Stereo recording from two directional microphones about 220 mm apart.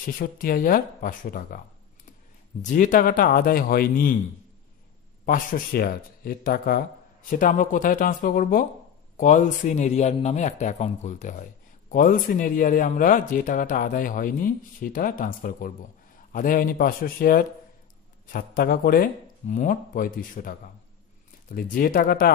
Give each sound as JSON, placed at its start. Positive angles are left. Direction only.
{"t": 0.0, "sound": "speech", "side_deg": 40}
{"t": 2.6, "sound": "speech", "side_deg": 35}
{"t": 5.2, "sound": "speech", "side_deg": 40}